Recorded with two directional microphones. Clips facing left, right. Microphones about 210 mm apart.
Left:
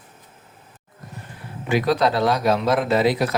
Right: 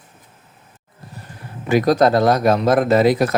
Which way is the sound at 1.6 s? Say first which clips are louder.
Right 5 dB; 45° right (ahead or behind).